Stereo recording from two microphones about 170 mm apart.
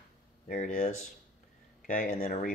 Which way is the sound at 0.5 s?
50° left (ahead or behind).